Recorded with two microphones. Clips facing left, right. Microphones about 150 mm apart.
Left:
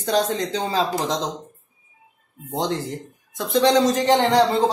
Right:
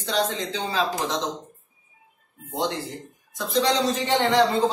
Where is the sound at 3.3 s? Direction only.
50° left (ahead or behind).